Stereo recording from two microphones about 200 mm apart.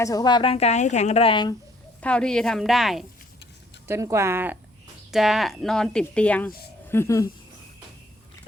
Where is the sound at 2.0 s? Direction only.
5° left (ahead or behind).